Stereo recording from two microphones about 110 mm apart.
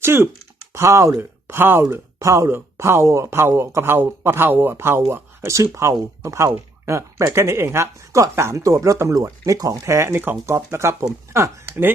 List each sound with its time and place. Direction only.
0.0 s speech: 20° right (ahead or behind)